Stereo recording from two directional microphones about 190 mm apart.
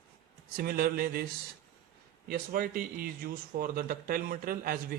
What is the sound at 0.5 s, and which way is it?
A man's voice, 50° right (ahead or behind).